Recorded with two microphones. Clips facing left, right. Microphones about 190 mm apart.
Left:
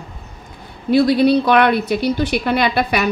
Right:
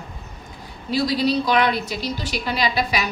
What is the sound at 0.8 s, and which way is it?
A woman's voice, 60° left (ahead or behind).